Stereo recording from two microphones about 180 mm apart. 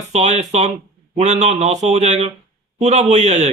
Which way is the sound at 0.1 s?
40° right (ahead or behind).